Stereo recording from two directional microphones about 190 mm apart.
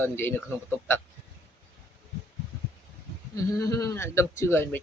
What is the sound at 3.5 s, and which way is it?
A man's voice, 20° left (ahead or behind).